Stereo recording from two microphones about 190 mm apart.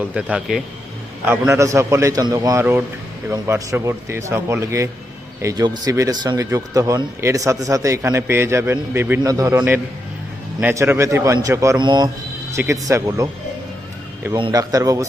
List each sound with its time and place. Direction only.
0.0 s a man's voice: 5° right (ahead or behind)
1.3 s speech: 15° right (ahead or behind)
14.3 s a man's voice: 20° right (ahead or behind)